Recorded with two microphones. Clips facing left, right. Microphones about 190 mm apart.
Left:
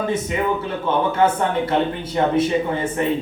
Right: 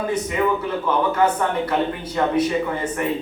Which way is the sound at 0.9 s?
25° left (ahead or behind).